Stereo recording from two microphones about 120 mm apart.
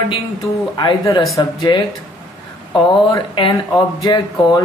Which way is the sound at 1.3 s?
30° left (ahead or behind).